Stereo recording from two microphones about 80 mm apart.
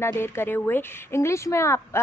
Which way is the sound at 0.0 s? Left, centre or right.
Left.